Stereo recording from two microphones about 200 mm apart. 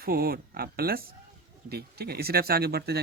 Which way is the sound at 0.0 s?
50° right (ahead or behind).